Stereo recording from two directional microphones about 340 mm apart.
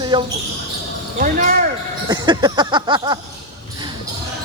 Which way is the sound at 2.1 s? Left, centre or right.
Centre.